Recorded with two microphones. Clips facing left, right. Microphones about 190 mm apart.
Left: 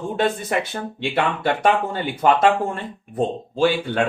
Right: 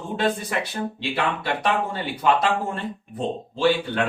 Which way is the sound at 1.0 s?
50° left (ahead or behind).